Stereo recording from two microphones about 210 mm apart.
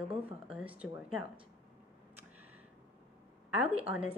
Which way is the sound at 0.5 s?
5° right (ahead or behind).